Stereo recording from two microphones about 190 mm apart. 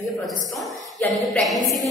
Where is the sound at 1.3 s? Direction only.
Centre (ahead or behind).